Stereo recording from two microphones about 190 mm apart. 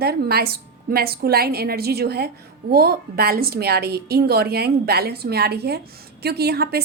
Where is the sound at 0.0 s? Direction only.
55° right (ahead or behind).